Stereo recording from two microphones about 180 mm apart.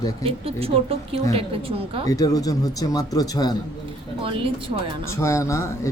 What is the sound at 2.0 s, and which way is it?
Speech, 20° left (ahead or behind).